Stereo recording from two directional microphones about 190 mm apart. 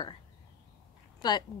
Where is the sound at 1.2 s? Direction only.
20° left (ahead or behind).